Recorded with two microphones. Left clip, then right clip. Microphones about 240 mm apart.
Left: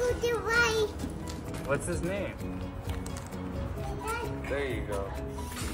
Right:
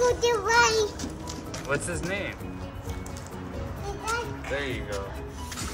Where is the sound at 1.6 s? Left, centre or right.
Centre.